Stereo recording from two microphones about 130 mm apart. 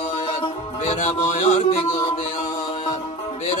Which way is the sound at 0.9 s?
65° left (ahead or behind).